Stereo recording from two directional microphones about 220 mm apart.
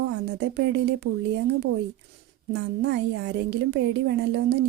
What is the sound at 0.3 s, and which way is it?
Speech, 50° right (ahead or behind).